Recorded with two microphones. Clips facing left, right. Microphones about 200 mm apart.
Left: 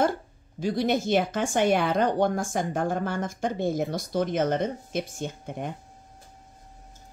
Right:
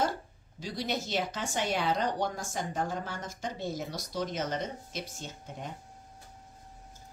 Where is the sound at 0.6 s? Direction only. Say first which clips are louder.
Left 9 dB; 55° left (ahead or behind).